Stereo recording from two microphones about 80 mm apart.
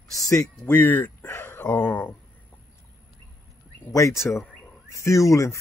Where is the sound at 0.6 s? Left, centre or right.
Left.